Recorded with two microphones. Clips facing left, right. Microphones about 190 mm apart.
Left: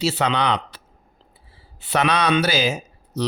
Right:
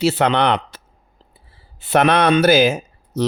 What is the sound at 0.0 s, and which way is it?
Speech, 55° right (ahead or behind).